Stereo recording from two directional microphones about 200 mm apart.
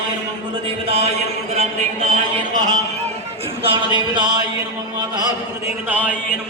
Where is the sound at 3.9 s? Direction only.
20° right (ahead or behind).